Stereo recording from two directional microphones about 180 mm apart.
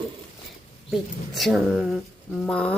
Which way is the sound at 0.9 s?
Centre (ahead or behind).